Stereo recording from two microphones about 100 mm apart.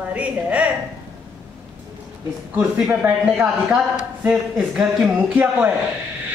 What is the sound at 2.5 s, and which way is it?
Speech, 15° right (ahead or behind).